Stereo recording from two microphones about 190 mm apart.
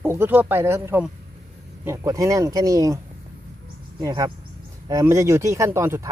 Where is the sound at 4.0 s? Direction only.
20° right (ahead or behind).